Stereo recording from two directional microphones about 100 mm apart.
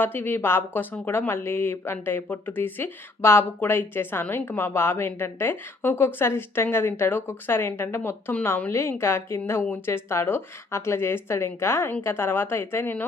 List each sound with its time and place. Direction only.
0.0 s speech: 20° left (ahead or behind)